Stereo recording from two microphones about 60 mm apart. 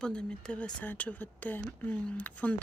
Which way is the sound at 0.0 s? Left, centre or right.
Centre.